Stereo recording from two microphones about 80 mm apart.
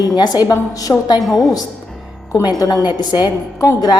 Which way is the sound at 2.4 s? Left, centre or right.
Left.